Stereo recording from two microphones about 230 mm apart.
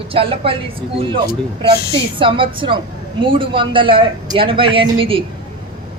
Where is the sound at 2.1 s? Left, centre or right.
Right.